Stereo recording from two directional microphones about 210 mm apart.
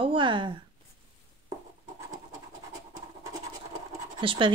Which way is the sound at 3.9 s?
25° right (ahead or behind).